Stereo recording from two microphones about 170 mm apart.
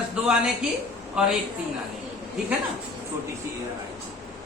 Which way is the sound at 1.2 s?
5° right (ahead or behind).